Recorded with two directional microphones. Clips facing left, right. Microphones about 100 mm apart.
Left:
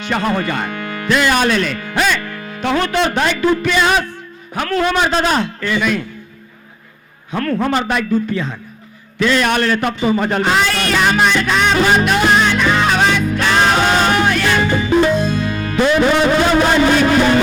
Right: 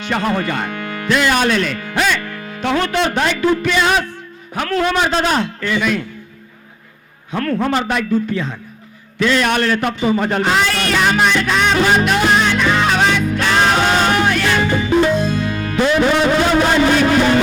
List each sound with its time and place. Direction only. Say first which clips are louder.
0.0 s a man's voice: left 1 dB; 25° left (ahead or behind)
7.3 s a man's voice: left 1 dB; 25° left (ahead or behind)
9.1 s a sound: left 1 dB; 25° left (ahead or behind)
16.6 s speech: left 1 dB; 25° left (ahead or behind)